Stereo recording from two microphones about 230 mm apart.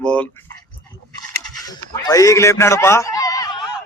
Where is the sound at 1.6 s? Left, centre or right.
Centre.